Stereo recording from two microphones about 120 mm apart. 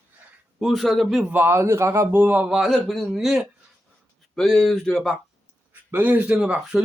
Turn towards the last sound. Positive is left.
turn(degrees=-5)  # may be behind; listen again after turning